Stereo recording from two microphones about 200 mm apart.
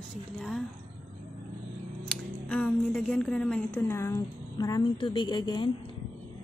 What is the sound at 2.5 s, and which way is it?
A woman's voice, 5° left (ahead or behind).